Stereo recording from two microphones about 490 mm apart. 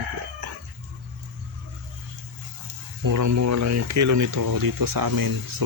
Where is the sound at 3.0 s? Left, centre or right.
Right.